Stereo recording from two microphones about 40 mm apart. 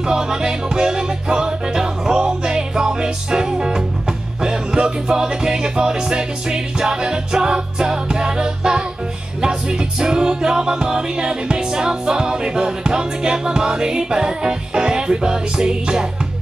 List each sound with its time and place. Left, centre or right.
0.1 s music: centre